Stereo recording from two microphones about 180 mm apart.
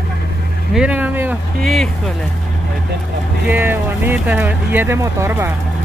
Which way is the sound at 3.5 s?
10° right (ahead or behind).